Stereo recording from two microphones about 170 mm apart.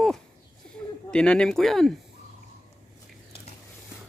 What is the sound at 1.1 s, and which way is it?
Speech, 5° left (ahead or behind).